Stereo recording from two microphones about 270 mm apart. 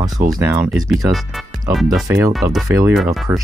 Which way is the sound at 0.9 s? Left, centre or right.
Centre.